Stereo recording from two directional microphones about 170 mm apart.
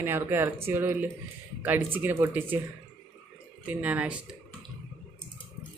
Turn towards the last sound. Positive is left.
turn(degrees=-5)  # may be behind; listen again after turning